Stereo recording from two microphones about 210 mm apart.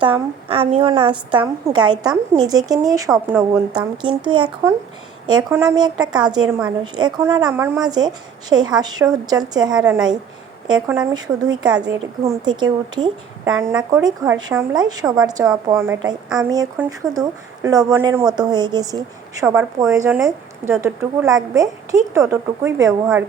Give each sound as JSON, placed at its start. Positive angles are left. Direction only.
{"t": 0.0, "sound": "a woman's voice", "side_deg": -25}
{"t": 13.5, "sound": "a woman's voice", "side_deg": -10}